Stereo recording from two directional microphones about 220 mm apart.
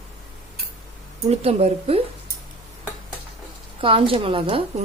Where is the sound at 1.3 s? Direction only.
30° right (ahead or behind).